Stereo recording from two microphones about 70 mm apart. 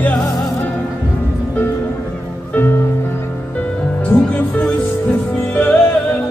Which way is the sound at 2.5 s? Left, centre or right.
Left.